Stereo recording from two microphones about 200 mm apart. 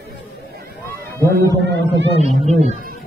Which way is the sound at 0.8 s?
10° left (ahead or behind).